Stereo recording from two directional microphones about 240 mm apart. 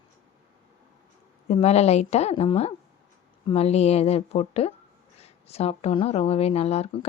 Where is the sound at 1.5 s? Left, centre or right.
Left.